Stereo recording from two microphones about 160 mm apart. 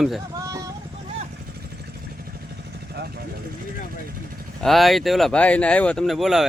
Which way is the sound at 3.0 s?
85° right.